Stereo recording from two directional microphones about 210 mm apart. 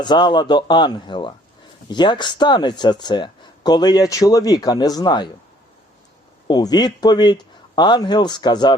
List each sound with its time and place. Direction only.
0.0 s speech: 20° left (ahead or behind)
6.5 s speech: 20° left (ahead or behind)